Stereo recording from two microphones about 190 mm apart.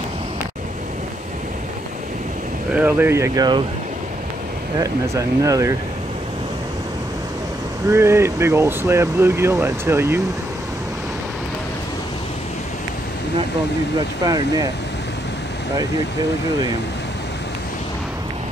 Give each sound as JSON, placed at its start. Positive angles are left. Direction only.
{"t": 2.7, "sound": "speech", "side_deg": -10}
{"t": 4.7, "sound": "speech", "side_deg": -15}
{"t": 7.9, "sound": "speech", "side_deg": -15}
{"t": 14.2, "sound": "speech", "side_deg": -20}